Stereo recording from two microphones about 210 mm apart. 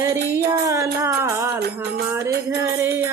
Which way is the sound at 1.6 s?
50° right (ahead or behind).